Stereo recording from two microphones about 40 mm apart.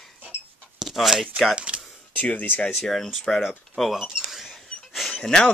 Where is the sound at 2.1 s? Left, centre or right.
Left.